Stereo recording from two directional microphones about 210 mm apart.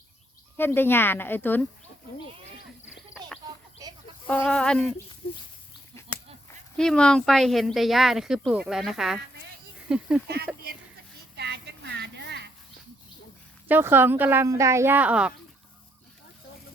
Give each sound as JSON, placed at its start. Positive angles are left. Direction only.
{"t": 0.5, "sound": "speech", "side_deg": 10}
{"t": 3.8, "sound": "chicken", "side_deg": -15}
{"t": 4.3, "sound": "speech", "side_deg": 5}
{"t": 5.2, "sound": "speech", "side_deg": 45}
{"t": 6.7, "sound": "speech", "side_deg": 5}
{"t": 11.3, "sound": "a sound", "side_deg": -55}
{"t": 13.7, "sound": "speech", "side_deg": -10}